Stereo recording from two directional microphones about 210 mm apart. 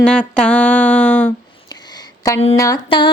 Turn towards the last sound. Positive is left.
turn(degrees=20)  # may be behind; listen again after turning